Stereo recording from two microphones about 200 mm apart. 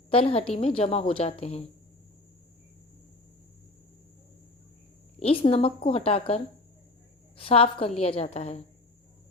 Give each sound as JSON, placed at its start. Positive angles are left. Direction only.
{"t": 0.1, "sound": "a woman's voice", "side_deg": 30}
{"t": 5.2, "sound": "a woman's voice", "side_deg": 30}